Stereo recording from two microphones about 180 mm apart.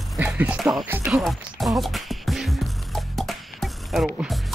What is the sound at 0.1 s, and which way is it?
Speech, 5° right (ahead or behind).